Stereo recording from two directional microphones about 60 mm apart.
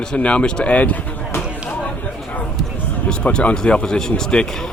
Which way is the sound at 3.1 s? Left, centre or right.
Centre.